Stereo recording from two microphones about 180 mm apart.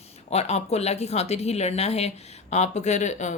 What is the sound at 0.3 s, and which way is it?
A woman's voice, 35° left (ahead or behind).